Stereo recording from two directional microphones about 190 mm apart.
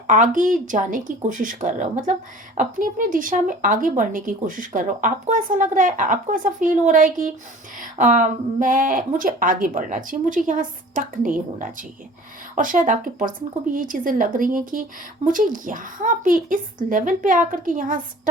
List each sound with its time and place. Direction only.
0.1 s speech: 45° right (ahead or behind)